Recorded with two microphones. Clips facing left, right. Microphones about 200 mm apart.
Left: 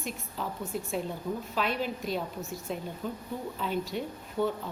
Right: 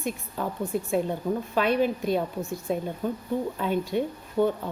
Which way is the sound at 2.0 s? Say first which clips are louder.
Right 7 dB; 55° right (ahead or behind).